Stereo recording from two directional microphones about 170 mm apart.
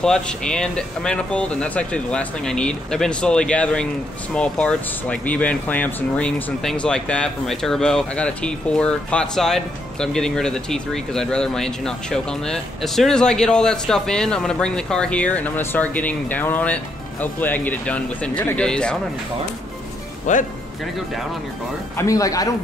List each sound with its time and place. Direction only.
0.0 s speech: 5° left (ahead or behind)
20.3 s speech: 45° left (ahead or behind)
21.9 s speech: 20° left (ahead or behind)